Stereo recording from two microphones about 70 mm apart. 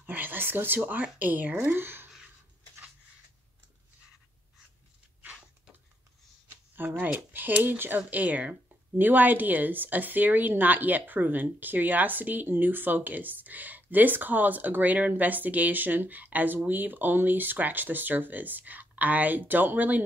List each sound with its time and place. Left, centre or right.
0.0 s speech: right
6.7 s speech: right